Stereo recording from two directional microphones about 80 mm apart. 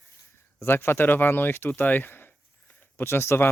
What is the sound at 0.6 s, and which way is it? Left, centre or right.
Speech, left.